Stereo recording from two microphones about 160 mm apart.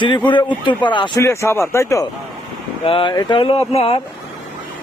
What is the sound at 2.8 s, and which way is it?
Speech, 35° left (ahead or behind).